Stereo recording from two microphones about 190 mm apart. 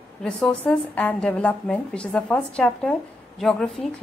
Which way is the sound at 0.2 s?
5° left (ahead or behind).